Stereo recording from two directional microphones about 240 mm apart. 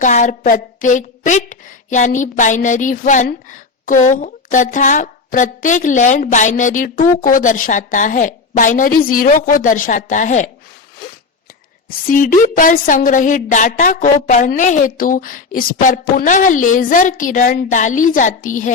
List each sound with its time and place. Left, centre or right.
0.0 s a woman's voice: left
12.0 s a woman's voice: left